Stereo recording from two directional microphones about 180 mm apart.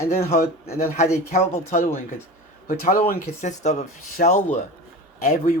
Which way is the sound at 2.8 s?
50° left (ahead or behind).